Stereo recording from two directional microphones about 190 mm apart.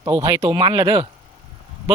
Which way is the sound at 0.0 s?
25° right (ahead or behind).